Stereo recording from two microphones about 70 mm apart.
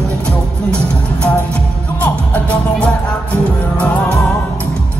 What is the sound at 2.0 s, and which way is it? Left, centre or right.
Music, left.